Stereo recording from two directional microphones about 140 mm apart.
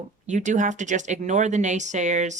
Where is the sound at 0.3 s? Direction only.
60° right (ahead or behind).